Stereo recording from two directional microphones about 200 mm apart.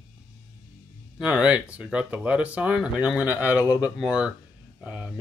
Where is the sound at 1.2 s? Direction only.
5° right (ahead or behind).